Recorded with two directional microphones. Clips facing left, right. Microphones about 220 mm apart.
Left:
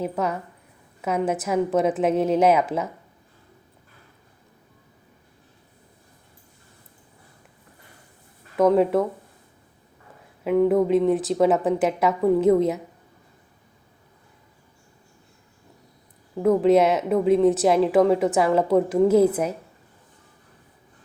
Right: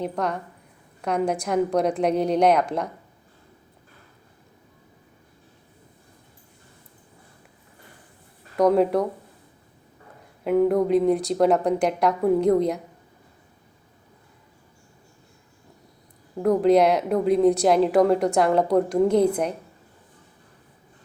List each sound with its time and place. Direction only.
0.0 s a woman's voice: 5° left (ahead or behind)
8.5 s a woman's voice: centre (ahead or behind)
10.4 s a woman's voice: centre (ahead or behind)
16.4 s a woman's voice: centre (ahead or behind)